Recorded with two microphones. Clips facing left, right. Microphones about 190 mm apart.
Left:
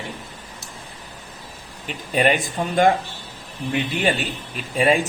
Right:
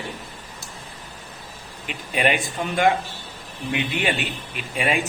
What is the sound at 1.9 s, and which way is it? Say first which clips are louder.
Speech: left 3 dB; 40° left (ahead or behind).